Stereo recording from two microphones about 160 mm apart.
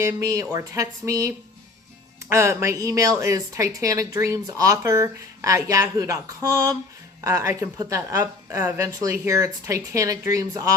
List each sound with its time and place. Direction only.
0.0 s a woman's voice: 20° right (ahead or behind)
2.3 s a woman's voice: 15° right (ahead or behind)